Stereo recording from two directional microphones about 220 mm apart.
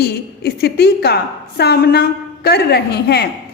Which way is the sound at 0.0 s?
45° left (ahead or behind).